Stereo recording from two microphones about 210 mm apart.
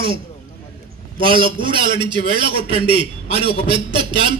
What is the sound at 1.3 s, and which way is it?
A man's voice, 25° right (ahead or behind).